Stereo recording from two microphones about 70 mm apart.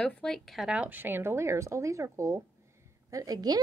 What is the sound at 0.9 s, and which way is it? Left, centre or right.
Speech, right.